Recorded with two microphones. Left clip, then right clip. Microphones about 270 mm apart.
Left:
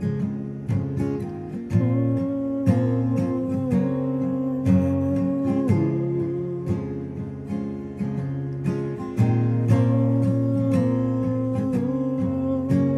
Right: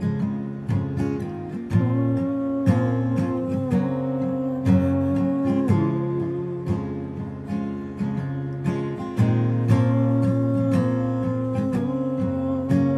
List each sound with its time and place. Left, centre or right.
1.7 s music: centre
9.2 s music: centre